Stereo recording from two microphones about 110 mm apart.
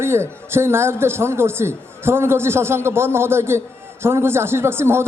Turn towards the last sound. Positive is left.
turn(degrees=-20)  # may be behind; listen again after turning